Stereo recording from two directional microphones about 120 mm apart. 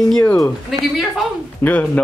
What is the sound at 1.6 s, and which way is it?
Speech, 10° left (ahead or behind).